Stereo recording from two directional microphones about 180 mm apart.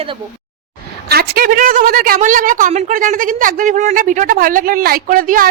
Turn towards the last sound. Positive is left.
turn(degrees=-50)  # may be behind; listen again after turning